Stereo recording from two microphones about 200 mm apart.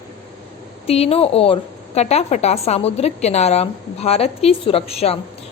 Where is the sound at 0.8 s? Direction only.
30° left (ahead or behind).